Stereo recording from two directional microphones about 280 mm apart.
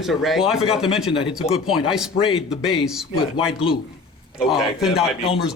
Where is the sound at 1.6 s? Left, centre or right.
Centre.